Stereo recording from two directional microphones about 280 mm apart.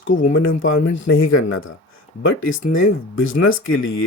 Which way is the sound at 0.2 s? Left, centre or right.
Left.